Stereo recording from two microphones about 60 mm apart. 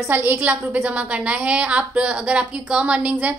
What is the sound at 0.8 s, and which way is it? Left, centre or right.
A woman's voice, right.